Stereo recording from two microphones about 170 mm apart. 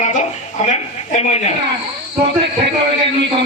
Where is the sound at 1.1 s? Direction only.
40° left (ahead or behind).